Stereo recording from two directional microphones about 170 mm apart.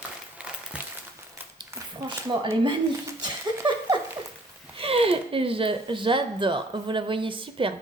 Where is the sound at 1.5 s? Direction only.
25° right (ahead or behind).